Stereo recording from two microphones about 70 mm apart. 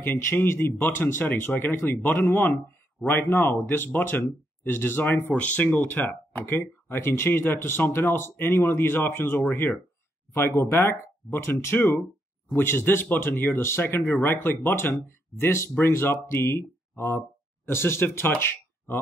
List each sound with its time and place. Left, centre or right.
0.0 s speech: left
5.3 s speech: left
6.9 s speech: left
10.3 s speech: left